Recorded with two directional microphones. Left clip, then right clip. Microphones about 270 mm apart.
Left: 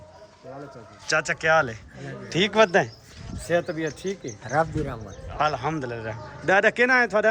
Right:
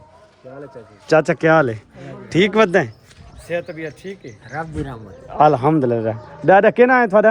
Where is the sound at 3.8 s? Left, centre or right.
Centre.